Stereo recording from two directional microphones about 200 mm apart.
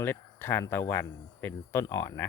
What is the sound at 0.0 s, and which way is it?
Speech, 10° left (ahead or behind).